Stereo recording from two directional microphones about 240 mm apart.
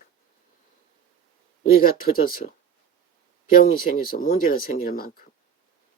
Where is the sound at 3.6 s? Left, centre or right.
Left.